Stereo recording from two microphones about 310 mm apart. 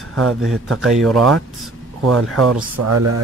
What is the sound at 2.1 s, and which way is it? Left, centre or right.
Speech, right.